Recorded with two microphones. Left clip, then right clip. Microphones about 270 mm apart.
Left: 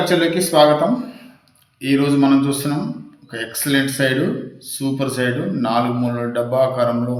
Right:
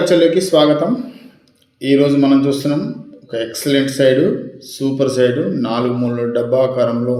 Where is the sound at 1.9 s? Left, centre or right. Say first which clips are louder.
Right 3 dB; centre.